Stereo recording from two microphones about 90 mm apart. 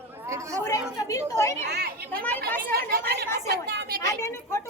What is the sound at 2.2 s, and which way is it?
Speech, 20° left (ahead or behind).